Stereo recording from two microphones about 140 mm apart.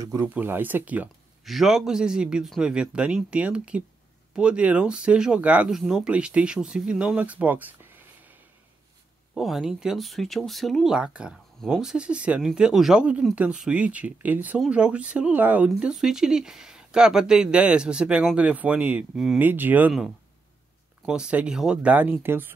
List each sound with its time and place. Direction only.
0.0 s speech: 25° right (ahead or behind)
0.3 s speech: 10° right (ahead or behind)
9.3 s speech: centre (ahead or behind)
21.0 s speech: 5° right (ahead or behind)